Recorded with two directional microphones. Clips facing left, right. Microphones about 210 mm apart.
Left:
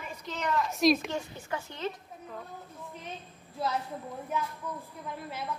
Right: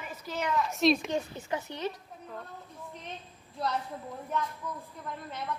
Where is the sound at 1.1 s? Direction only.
20° right (ahead or behind).